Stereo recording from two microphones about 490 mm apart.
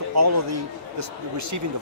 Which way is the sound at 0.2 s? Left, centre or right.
Right.